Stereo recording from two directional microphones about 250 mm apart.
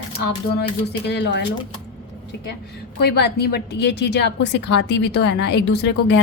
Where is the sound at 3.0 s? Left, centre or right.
Left.